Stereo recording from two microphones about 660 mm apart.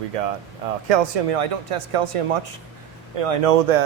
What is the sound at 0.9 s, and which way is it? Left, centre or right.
Speech, right.